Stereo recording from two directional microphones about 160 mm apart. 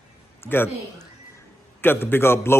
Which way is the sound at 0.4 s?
15° left (ahead or behind).